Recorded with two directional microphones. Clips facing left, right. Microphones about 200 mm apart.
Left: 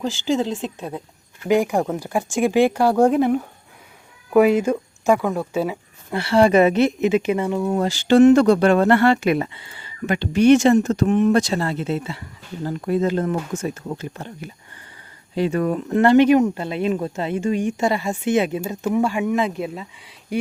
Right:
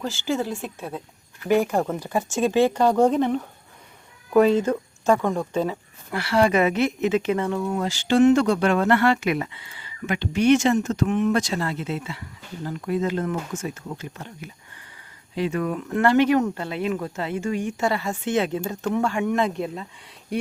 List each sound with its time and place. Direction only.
0.0 s speech: 15° left (ahead or behind)
6.1 s speech: 25° left (ahead or behind)
7.0 s speech: 15° left (ahead or behind)
7.7 s speech: 35° left (ahead or behind); by 19.9 s 5° left (ahead or behind)
20.3 s a sound: centre (ahead or behind)